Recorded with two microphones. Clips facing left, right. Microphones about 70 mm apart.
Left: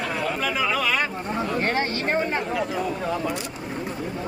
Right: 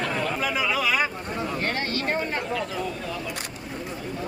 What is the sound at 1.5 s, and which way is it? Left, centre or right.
Speech, left.